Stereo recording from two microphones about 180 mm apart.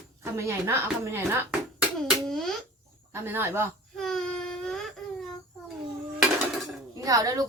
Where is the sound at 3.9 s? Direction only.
Centre (ahead or behind).